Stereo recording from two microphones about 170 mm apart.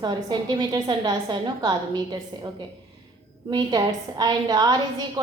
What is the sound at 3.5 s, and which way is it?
A woman's voice, 25° right (ahead or behind).